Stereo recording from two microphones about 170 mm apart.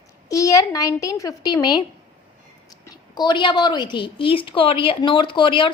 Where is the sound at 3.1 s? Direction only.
25° left (ahead or behind).